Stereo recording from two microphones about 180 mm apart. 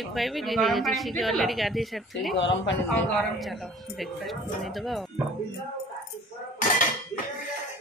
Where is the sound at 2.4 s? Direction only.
85° left.